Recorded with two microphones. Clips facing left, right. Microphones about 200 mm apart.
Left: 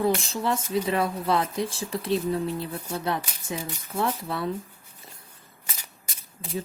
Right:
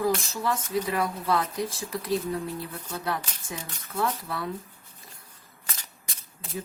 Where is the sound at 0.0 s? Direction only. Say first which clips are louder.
Left 2 dB; 25° left (ahead or behind).